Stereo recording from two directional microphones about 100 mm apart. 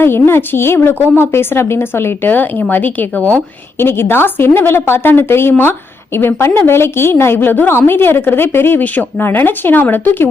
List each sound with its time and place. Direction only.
0.0 s speech: 20° left (ahead or behind)